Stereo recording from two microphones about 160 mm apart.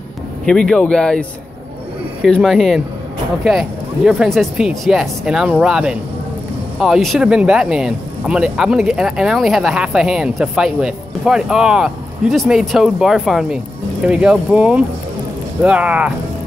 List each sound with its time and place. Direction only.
0.5 s speech: 5° left (ahead or behind)
2.2 s speech: centre (ahead or behind)